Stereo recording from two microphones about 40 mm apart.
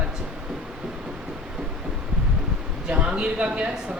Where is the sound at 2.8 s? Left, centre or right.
Right.